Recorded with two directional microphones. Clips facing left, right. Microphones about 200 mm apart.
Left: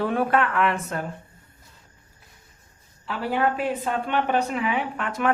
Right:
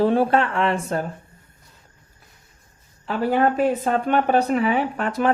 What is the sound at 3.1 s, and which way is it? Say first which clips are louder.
Speech: right 5 dB; 45° right (ahead or behind).